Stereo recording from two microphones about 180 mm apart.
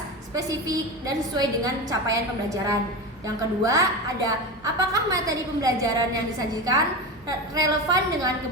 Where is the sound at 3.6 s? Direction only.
20° right (ahead or behind).